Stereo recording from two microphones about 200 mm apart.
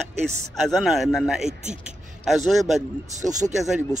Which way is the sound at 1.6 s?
35° right (ahead or behind).